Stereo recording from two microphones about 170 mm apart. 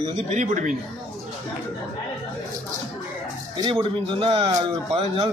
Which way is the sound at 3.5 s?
25° right (ahead or behind).